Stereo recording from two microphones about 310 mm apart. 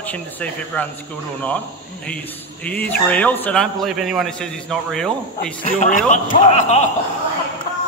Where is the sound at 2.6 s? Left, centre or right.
Centre.